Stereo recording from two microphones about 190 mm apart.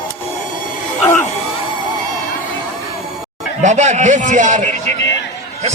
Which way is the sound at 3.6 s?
40° right (ahead or behind).